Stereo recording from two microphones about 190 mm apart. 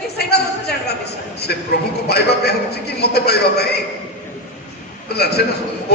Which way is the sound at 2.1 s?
55° left (ahead or behind).